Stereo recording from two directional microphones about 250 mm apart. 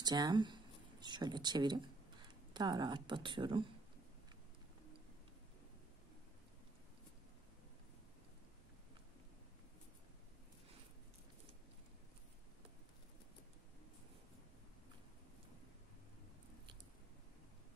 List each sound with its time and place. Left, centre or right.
0.0 s speech: centre